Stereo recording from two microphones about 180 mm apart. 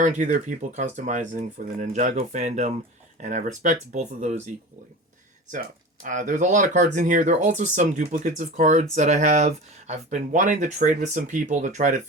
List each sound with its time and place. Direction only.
0.0 s speech: 45° right (ahead or behind)
5.5 s speech: 45° right (ahead or behind)